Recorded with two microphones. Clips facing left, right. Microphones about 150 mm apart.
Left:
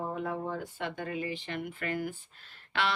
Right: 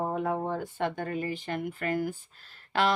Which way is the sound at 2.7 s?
40° right (ahead or behind).